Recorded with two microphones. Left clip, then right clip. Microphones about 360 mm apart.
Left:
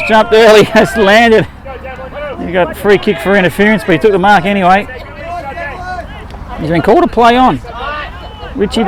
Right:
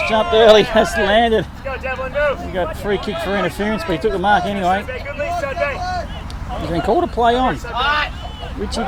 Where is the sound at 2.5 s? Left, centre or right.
Left.